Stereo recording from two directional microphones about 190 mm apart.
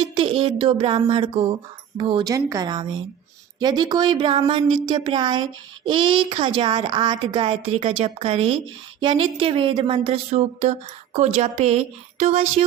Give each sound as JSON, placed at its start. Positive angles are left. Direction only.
{"t": 0.0, "sound": "speech", "side_deg": -25}